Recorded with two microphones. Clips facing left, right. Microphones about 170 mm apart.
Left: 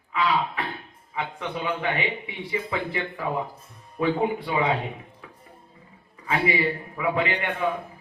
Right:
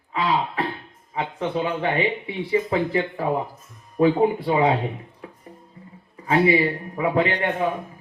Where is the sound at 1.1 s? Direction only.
30° right (ahead or behind).